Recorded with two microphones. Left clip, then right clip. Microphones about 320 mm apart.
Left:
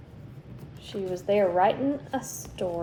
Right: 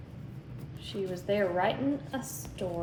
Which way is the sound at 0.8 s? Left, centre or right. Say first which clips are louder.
Left 4 dB; centre.